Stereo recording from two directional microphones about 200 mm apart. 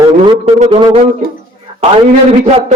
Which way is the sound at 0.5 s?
35° right (ahead or behind).